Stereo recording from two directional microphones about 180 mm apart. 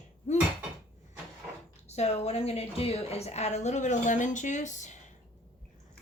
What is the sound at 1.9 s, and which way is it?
A woman's voice, 35° left (ahead or behind).